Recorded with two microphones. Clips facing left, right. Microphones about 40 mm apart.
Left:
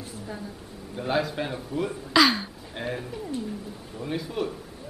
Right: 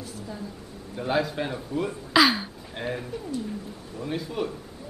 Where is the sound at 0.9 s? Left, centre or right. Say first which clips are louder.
Right 1 dB; centre.